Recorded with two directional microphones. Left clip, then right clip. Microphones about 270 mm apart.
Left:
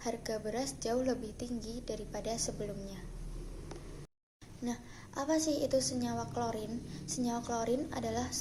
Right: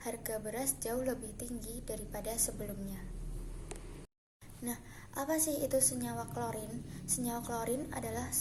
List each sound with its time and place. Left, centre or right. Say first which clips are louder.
0.0 s a woman's voice: left 2 dB; centre
4.6 s a woman's voice: left 3 dB; centre